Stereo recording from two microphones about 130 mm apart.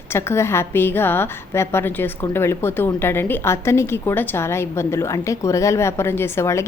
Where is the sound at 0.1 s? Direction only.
20° left (ahead or behind).